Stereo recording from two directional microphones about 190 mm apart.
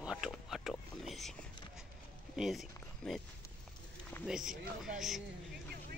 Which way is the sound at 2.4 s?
Centre (ahead or behind).